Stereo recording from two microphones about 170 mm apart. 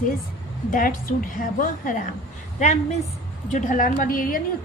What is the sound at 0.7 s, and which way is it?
A woman's voice, 55° left (ahead or behind).